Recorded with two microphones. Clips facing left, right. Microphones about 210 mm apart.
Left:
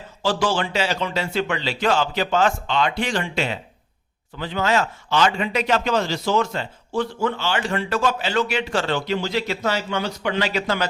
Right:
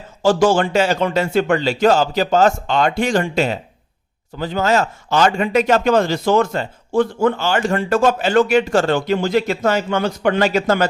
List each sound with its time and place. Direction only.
0.2 s a man's voice: 45° right (ahead or behind)